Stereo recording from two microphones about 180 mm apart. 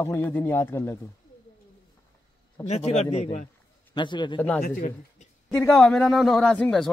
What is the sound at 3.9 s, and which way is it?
Speech, 25° left (ahead or behind).